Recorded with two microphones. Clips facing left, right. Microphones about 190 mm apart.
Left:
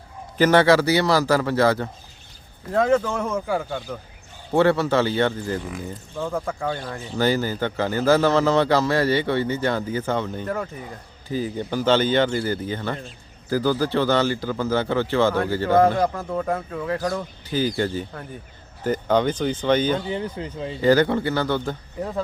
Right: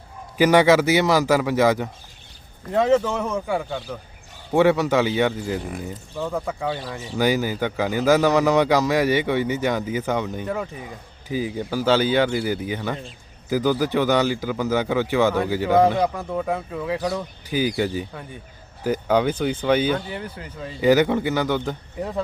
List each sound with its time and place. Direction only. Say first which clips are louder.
0.3 s speech: right 1 dB; 10° right (ahead or behind)
2.9 s speech: right 1 dB; centre (ahead or behind)
4.5 s speech: right 1 dB; 15° right (ahead or behind)
6.1 s speech: even; centre (ahead or behind)
10.4 s speech: even; centre (ahead or behind)
15.7 s speech: even; centre (ahead or behind)
20.1 s speech: left 5 dB; 25° left (ahead or behind)
20.8 s speech: right 1 dB; 15° right (ahead or behind)